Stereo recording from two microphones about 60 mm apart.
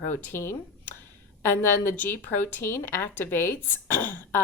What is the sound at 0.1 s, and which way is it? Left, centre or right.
A woman's voice, left.